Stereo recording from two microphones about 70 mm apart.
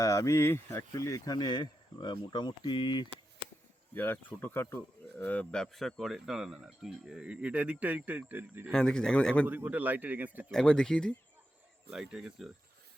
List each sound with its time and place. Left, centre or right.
0.0 s speech: left
0.9 s speech: left
3.9 s speech: left; by 8.6 s right
8.7 s speech: centre
9.5 s a man's voice: right
10.5 s speech: centre
11.9 s speech: centre